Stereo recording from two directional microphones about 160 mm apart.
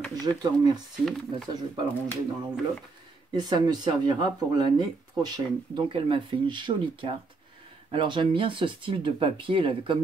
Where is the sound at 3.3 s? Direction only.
25° right (ahead or behind).